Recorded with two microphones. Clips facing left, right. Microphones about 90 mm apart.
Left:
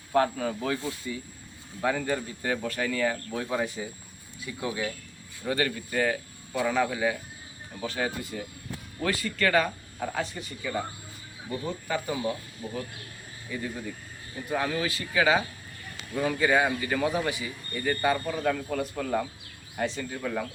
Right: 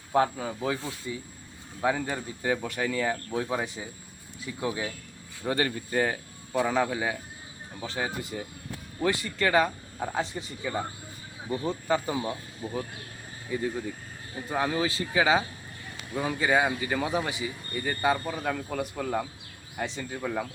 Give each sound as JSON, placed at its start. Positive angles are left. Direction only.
{"t": 0.1, "sound": "a man's voice", "side_deg": -15}
{"t": 13.5, "sound": "a man's voice", "side_deg": -20}